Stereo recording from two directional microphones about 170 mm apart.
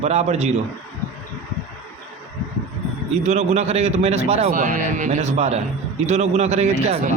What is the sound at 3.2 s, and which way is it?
A man's voice, 40° right (ahead or behind).